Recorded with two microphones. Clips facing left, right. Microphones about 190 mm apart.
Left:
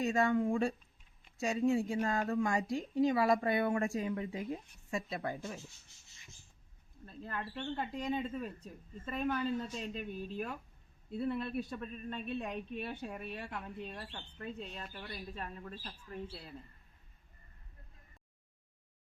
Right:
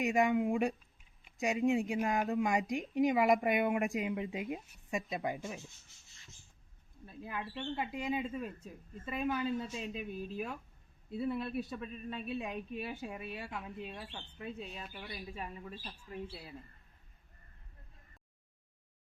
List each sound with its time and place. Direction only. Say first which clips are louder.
0.0 s speech: right 1 dB; 15° right (ahead or behind)
7.0 s speech: even; 10° right (ahead or behind)